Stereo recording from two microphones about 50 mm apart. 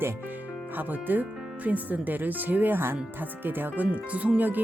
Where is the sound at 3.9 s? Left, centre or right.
Right.